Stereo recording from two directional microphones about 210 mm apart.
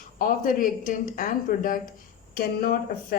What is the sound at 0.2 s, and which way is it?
Speech, 40° left (ahead or behind).